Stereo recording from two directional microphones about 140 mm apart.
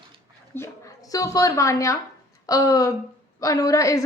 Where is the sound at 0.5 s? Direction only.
20° left (ahead or behind).